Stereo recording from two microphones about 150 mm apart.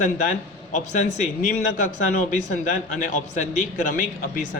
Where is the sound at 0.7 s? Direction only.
55° left (ahead or behind).